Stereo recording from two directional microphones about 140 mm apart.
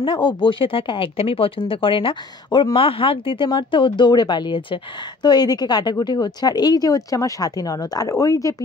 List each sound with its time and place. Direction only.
0.0 s a woman's voice: 35° left (ahead or behind)